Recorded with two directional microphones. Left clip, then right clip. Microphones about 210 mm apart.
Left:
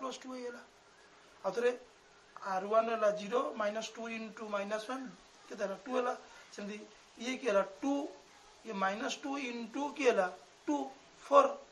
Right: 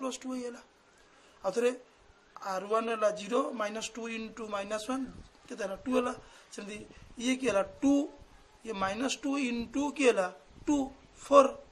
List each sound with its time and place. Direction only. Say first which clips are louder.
0.0 s speech: right 4 dB; 50° right (ahead or behind)